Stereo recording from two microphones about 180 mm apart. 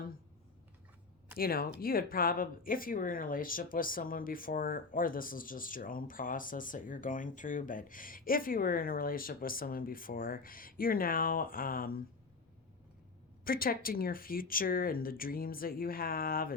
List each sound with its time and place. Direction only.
1.4 s speech: 55° left (ahead or behind)
13.4 s speech: 55° left (ahead or behind)